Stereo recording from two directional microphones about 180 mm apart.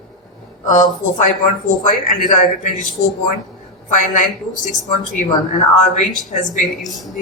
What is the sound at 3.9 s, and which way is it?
Speech, 45° left (ahead or behind).